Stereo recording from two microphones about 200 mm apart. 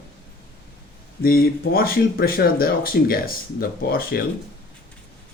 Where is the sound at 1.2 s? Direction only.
50° left (ahead or behind).